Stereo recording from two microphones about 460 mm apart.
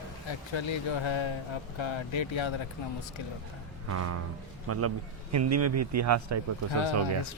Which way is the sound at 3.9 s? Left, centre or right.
Right.